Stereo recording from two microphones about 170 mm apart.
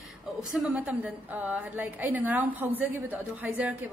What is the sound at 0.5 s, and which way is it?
A woman's voice, centre (ahead or behind).